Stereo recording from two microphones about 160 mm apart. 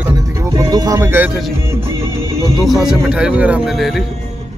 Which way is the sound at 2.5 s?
Centre (ahead or behind).